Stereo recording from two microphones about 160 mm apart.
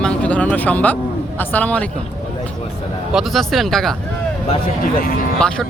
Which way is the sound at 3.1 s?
Centre (ahead or behind).